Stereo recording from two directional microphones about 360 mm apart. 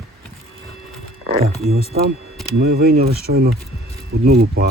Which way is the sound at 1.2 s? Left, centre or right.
Centre.